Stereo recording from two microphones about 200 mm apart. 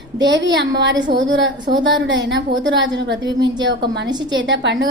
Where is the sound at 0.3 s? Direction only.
60° right (ahead or behind).